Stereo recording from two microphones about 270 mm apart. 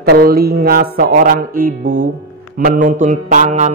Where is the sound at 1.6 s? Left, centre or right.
Right.